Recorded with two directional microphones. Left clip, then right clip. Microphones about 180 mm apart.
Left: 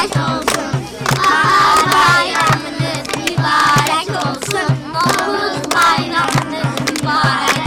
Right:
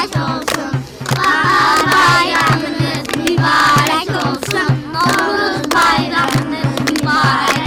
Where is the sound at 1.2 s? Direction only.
10° left (ahead or behind).